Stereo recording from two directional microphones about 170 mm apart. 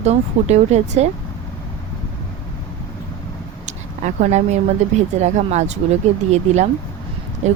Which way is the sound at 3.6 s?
45° right (ahead or behind).